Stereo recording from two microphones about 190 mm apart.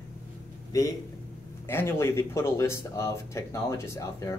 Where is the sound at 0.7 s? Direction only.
15° left (ahead or behind).